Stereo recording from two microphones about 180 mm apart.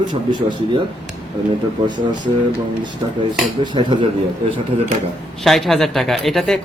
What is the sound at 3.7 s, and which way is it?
Speech, 30° right (ahead or behind).